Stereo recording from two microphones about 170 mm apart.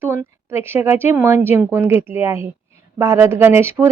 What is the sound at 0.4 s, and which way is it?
Speech, 15° right (ahead or behind).